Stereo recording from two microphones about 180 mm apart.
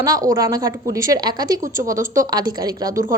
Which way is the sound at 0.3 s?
20° right (ahead or behind).